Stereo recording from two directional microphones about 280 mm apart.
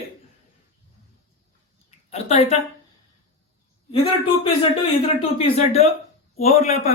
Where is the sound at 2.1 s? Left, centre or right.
Left.